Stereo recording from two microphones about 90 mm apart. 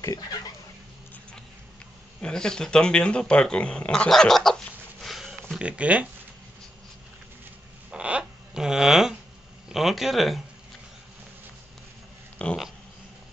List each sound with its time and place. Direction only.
0.0 s speech: 45° left (ahead or behind)
2.2 s speech: 10° left (ahead or behind)
5.0 s a sound: 5° right (ahead or behind)
5.6 s speech: 15° right (ahead or behind)
7.9 s a sound: 10° right (ahead or behind)
9.7 s speech: 5° right (ahead or behind)
12.4 s speech: 15° left (ahead or behind)